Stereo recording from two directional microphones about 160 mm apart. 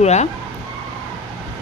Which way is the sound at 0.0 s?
45° left (ahead or behind).